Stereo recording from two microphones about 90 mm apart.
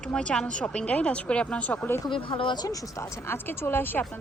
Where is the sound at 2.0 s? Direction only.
65° left (ahead or behind).